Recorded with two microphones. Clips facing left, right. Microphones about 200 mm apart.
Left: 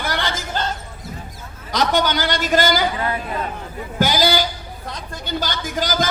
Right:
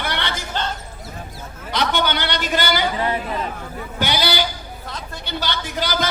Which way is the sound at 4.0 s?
45° left (ahead or behind).